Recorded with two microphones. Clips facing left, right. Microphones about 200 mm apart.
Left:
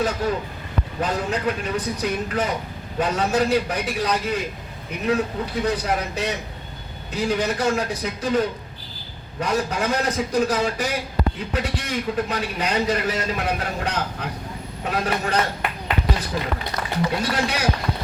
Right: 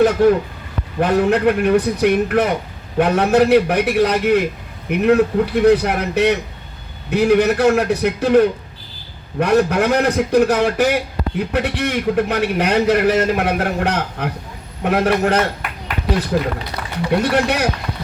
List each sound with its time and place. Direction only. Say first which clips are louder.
0.2 s a man's voice: right 11 dB; 75° right (ahead or behind)